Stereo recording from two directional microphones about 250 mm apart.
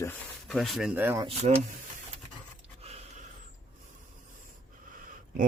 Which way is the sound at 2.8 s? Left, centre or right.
Right.